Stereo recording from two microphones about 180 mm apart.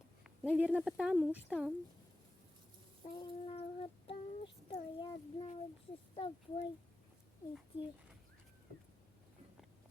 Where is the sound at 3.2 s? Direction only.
35° left (ahead or behind).